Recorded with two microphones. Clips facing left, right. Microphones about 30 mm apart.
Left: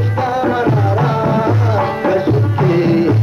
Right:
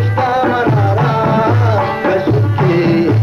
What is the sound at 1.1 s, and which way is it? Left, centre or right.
Music, right.